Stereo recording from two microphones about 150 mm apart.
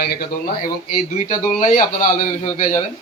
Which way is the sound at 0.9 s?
50° left (ahead or behind).